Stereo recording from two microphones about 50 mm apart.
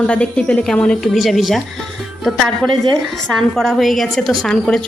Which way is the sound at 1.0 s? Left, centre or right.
Centre.